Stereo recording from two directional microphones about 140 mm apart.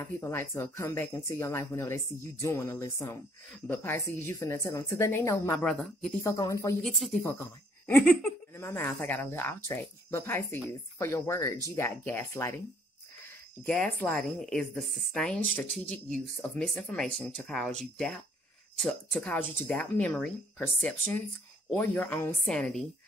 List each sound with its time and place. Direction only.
0.0 s speech: 20° left (ahead or behind)
5.7 s a woman's voice: 5° left (ahead or behind)
6.2 s speech: 25° left (ahead or behind)
6.8 s a woman's voice: 5° left (ahead or behind)
7.2 s speech: 15° left (ahead or behind)
13.7 s a woman's voice: 10° left (ahead or behind)